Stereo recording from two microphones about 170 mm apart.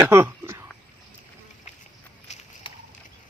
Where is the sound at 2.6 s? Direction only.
30° left (ahead or behind).